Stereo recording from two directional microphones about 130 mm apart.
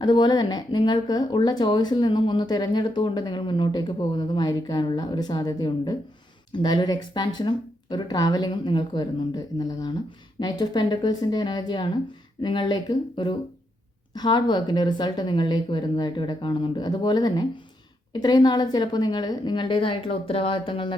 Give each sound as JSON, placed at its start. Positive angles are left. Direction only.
{"t": 0.0, "sound": "speech", "side_deg": 35}